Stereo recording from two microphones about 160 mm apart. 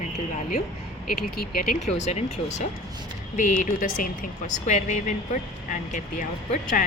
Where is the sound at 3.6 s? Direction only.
60° left (ahead or behind).